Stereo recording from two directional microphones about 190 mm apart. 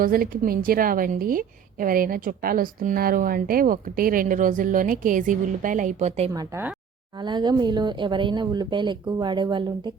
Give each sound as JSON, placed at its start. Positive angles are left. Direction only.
{"t": 0.0, "sound": "a woman's voice", "side_deg": -50}
{"t": 6.3, "sound": "speech", "side_deg": -15}
{"t": 7.2, "sound": "speech", "side_deg": -25}